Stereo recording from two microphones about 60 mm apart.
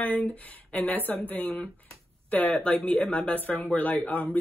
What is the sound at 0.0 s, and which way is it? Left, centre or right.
Speech, left.